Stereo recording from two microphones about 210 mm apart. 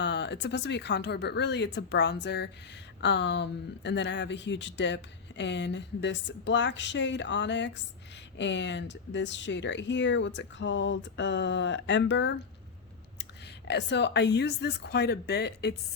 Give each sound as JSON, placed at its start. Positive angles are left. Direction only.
{"t": 0.0, "sound": "speech", "side_deg": 55}
{"t": 13.7, "sound": "a woman's voice", "side_deg": 55}